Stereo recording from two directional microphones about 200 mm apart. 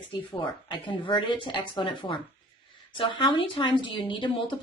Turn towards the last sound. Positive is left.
turn(degrees=25)  # may be behind; listen again after turning